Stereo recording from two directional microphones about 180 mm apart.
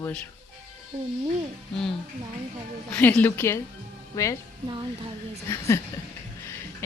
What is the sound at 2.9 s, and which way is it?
A woman's voice, 10° left (ahead or behind).